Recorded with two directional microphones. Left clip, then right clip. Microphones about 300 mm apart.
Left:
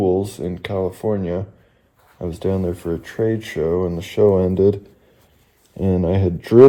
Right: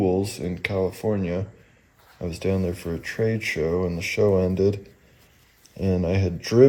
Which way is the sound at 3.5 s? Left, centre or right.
Left.